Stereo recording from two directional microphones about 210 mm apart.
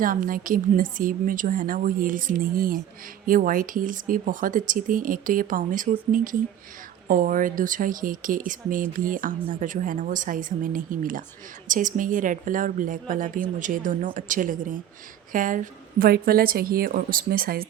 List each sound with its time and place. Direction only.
0.0 s a woman's voice: 40° right (ahead or behind)